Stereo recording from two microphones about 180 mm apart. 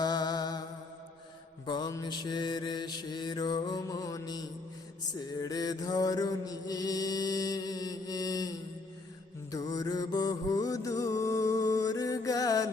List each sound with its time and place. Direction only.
0.0 s music: 25° left (ahead or behind)
1.6 s mantra: 25° left (ahead or behind)